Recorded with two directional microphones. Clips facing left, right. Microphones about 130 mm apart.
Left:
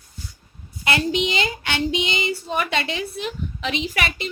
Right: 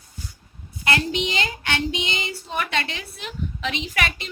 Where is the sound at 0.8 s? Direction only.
5° left (ahead or behind).